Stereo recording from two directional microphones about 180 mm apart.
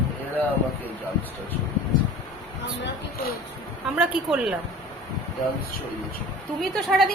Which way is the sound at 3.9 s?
5° right (ahead or behind).